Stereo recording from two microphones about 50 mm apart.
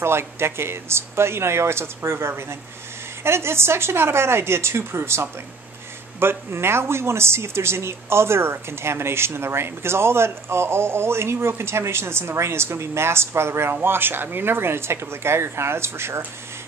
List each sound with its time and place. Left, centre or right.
0.0 s speech: right
13.8 s speech: right